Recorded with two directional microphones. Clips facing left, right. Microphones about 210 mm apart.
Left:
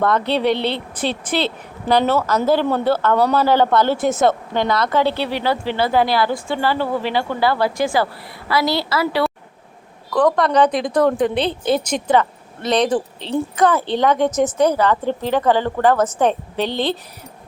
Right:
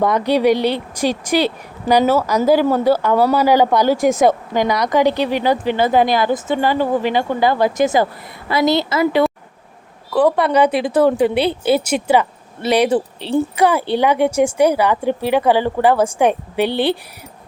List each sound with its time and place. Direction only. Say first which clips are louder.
0.0 s a woman's voice: right 3 dB; 15° right (ahead or behind)
10.1 s speech: right 2 dB; 10° right (ahead or behind)